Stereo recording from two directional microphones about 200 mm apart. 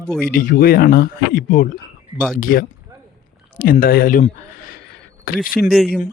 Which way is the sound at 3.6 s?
45° left (ahead or behind).